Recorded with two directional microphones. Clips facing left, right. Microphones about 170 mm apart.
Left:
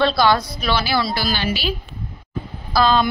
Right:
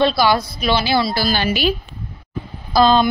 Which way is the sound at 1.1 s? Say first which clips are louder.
Right 3 dB; 40° right (ahead or behind).